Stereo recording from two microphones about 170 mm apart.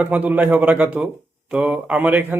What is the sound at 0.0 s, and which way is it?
A man's voice, 10° right (ahead or behind).